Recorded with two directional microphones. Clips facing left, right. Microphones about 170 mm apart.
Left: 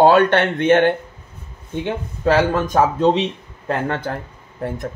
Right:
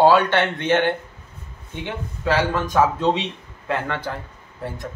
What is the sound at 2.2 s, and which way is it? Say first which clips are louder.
Speech: left 5 dB; 45° left (ahead or behind).